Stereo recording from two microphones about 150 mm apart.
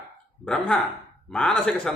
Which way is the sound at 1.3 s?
5° left (ahead or behind).